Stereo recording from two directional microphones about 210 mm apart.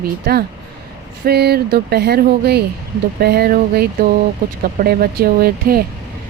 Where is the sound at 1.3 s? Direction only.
50° right (ahead or behind).